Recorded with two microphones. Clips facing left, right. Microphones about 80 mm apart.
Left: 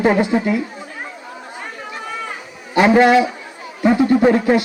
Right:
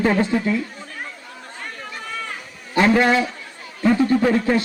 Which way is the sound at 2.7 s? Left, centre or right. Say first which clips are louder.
Left 5 dB; centre.